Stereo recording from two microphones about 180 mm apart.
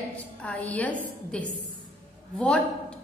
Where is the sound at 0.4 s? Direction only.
10° left (ahead or behind).